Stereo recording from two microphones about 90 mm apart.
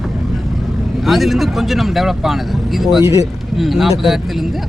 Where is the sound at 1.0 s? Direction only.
Centre (ahead or behind).